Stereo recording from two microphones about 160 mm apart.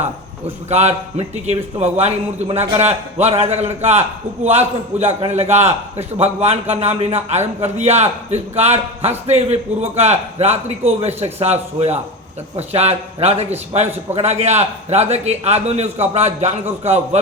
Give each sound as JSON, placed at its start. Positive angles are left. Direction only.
{"t": 0.0, "sound": "a man's voice", "side_deg": -45}